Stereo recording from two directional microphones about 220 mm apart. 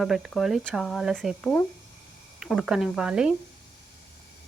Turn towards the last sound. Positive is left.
turn(degrees=-5)  # may be behind; listen again after turning